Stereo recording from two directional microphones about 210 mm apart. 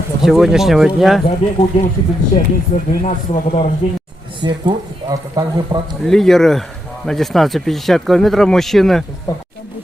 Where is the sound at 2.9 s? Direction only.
40° left (ahead or behind).